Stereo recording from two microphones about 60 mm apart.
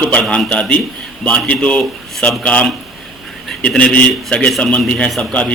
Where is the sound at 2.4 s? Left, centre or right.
Left.